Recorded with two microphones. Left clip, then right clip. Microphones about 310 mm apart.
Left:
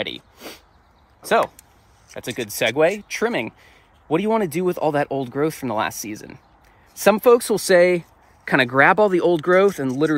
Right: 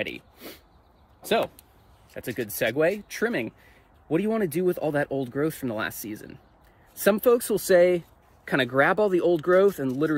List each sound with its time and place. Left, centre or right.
0.0 s speech: centre
2.1 s speech: centre